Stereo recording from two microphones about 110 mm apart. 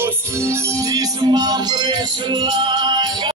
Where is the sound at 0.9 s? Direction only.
35° right (ahead or behind).